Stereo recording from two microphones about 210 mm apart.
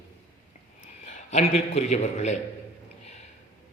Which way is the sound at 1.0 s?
35° left (ahead or behind).